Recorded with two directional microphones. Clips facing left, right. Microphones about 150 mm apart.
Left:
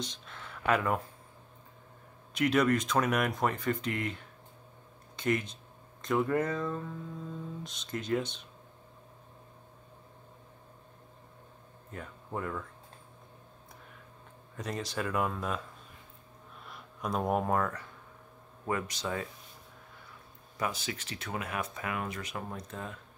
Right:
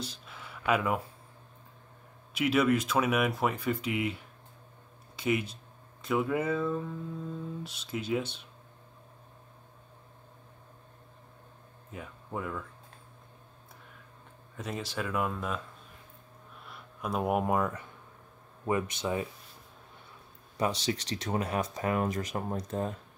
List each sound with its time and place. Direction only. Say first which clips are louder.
0.0 s a sound: even; 5° right (ahead or behind)
2.3 s speech: right 1 dB; 5° right (ahead or behind)
11.9 s speech: even; 5° right (ahead or behind)
14.6 s speech: even; centre (ahead or behind)
16.6 s speech: even; 5° right (ahead or behind); by 19.2 s 20° right (ahead or behind)
20.8 s speech: right 7 dB; 35° right (ahead or behind)